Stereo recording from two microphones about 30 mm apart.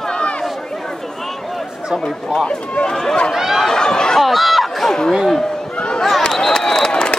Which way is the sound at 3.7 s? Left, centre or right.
Left.